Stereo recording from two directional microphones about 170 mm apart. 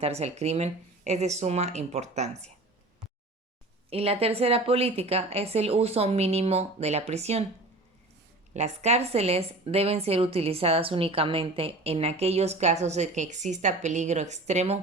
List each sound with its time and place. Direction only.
0.0 s a woman's voice: 40° right (ahead or behind)
3.8 s a woman's voice: 35° right (ahead or behind)
8.5 s a woman's voice: 40° right (ahead or behind)